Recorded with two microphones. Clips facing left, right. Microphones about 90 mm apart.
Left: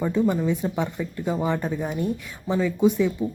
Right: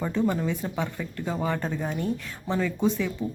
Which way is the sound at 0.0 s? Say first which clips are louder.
Left 3 dB; 10° left (ahead or behind).